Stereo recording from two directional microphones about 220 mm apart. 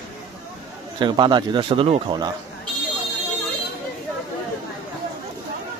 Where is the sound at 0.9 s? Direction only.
20° right (ahead or behind).